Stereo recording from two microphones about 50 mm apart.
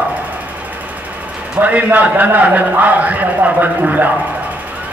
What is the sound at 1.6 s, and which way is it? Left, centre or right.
A man's voice, right.